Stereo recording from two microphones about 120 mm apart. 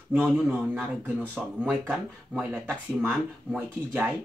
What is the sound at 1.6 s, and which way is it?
Speech, 15° right (ahead or behind).